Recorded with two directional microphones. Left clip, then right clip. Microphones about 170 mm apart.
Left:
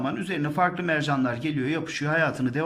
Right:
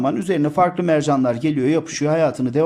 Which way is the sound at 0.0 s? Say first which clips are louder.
Right 9 dB; 35° right (ahead or behind).